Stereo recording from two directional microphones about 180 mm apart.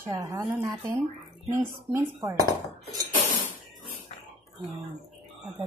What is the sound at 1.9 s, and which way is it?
Speech, 15° right (ahead or behind).